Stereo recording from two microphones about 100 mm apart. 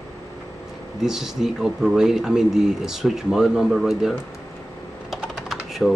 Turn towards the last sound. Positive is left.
turn(degrees=5)  # may be behind; listen again after turning